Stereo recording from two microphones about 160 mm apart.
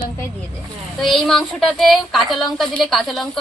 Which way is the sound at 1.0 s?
Centre (ahead or behind).